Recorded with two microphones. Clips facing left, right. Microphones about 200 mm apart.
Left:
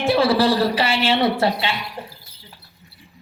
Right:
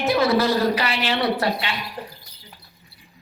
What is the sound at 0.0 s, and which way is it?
A man's voice, 30° left (ahead or behind).